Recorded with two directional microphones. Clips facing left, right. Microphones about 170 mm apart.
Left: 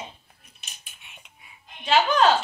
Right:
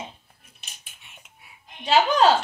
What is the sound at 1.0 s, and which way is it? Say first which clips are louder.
Whispering: left 1 dB; centre (ahead or behind).